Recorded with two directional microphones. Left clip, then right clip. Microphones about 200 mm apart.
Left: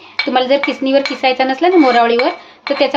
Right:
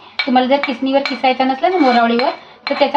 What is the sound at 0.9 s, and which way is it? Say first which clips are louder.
Speech: left 1 dB; 60° left (ahead or behind).